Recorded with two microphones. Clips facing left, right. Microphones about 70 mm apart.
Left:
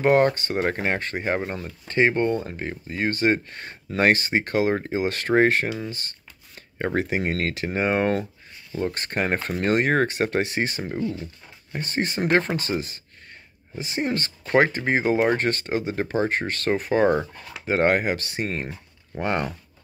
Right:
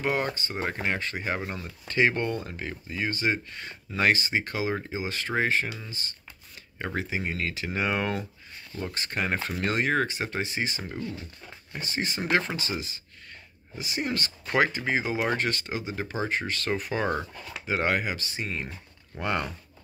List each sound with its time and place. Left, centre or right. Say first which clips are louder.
0.0 s speech: left 10 dB; left
2.9 s speech: left 6 dB; left
6.8 s speech: left 7 dB; left
7.7 s speech: left 6 dB; left
10.8 s speech: left 7 dB; left
11.7 s speech: left 5 dB; left